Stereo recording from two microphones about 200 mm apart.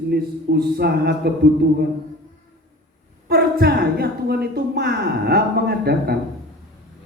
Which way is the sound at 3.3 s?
55° right (ahead or behind).